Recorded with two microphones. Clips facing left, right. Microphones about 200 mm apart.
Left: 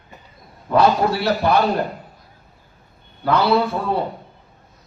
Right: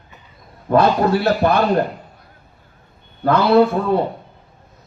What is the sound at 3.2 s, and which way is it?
Speech, 55° right (ahead or behind).